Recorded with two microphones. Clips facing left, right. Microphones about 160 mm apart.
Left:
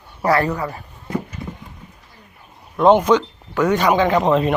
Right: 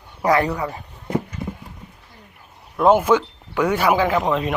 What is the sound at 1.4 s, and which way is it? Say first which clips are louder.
Clip-clop: right 2 dB; 25° right (ahead or behind).